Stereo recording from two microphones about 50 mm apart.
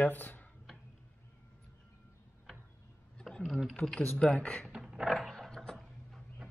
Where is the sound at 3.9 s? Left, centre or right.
Centre.